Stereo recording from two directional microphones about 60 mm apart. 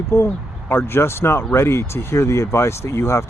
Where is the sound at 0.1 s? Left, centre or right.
Left.